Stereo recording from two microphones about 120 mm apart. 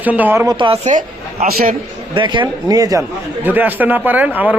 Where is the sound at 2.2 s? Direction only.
40° right (ahead or behind).